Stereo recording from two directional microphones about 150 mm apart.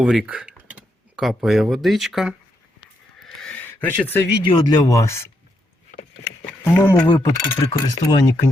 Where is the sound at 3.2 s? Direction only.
5° left (ahead or behind).